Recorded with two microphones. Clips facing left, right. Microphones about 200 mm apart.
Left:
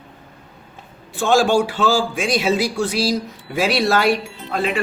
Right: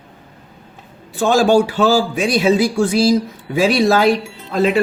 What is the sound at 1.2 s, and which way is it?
A man's voice, 40° right (ahead or behind).